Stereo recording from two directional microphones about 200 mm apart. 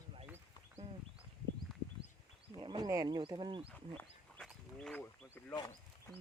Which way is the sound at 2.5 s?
20° right (ahead or behind).